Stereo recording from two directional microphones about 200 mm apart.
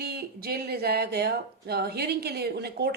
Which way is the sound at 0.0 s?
50° right (ahead or behind).